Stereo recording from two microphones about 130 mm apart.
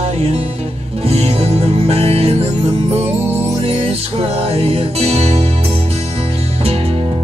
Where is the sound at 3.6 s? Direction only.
50° right (ahead or behind).